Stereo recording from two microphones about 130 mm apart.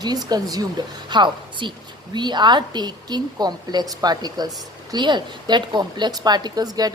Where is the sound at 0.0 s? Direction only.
30° right (ahead or behind).